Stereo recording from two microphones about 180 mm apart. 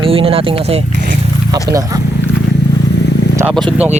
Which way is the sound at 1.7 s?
20° right (ahead or behind).